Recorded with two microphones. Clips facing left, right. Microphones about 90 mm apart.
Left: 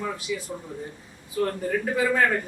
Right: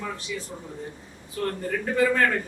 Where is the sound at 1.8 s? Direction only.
10° left (ahead or behind).